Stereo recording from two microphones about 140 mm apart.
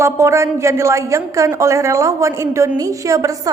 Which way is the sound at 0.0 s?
20° right (ahead or behind).